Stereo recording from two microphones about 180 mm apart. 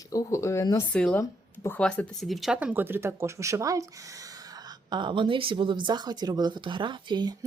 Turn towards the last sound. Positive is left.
turn(degrees=-20)  # may be behind; listen again after turning